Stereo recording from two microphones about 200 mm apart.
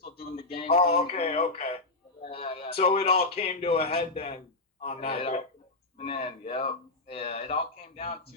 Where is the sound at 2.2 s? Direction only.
30° left (ahead or behind).